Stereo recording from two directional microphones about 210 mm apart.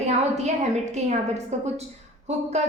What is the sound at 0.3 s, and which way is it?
A woman's voice, 30° right (ahead or behind).